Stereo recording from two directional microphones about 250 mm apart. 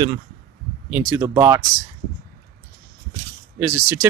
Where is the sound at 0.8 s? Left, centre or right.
Centre.